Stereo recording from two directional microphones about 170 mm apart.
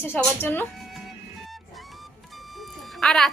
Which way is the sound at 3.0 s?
5° left (ahead or behind).